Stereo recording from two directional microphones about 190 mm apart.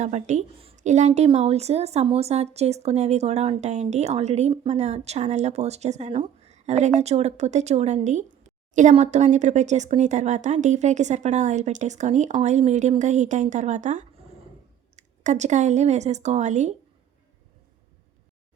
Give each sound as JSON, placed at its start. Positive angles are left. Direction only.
{"t": 0.0, "sound": "a woman's voice", "side_deg": -40}